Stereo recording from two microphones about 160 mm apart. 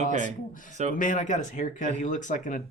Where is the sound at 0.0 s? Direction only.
45° right (ahead or behind).